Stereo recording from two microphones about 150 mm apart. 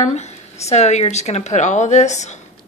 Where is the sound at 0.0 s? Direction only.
50° left (ahead or behind).